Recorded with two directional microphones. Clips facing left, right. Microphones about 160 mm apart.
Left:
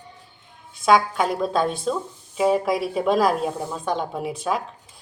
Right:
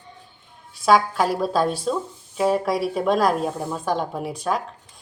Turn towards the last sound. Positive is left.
turn(degrees=0)  # may be behind; listen again after turning